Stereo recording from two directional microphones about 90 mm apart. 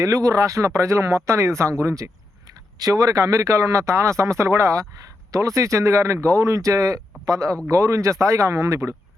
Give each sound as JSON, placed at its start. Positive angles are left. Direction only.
{"t": 0.0, "sound": "speech", "side_deg": -40}